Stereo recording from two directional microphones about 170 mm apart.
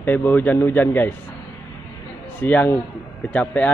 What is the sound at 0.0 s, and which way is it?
A man's voice, 10° left (ahead or behind).